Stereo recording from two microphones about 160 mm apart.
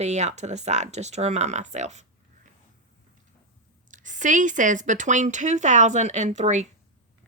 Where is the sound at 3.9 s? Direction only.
50° right (ahead or behind).